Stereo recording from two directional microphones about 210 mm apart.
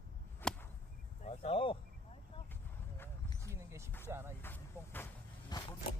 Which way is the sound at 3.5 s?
15° right (ahead or behind).